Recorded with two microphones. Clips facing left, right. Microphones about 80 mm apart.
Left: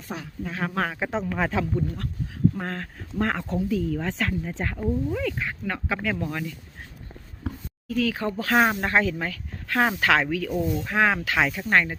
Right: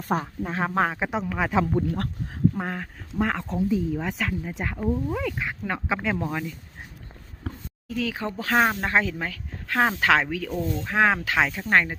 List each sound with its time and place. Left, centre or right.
0.1 s speech: right; by 1.2 s centre
1.2 s speech: centre
1.7 s speech: right
2.6 s speech: centre
3.7 s speech: centre
4.2 s speech: centre; by 6.3 s right
7.9 s speech: right
10.5 s speech: centre
10.8 s speech: centre